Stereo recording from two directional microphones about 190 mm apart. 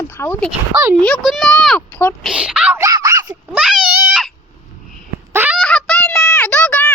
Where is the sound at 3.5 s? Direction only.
5° right (ahead or behind).